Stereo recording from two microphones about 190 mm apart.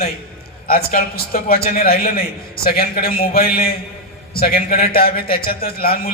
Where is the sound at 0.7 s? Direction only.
50° left (ahead or behind).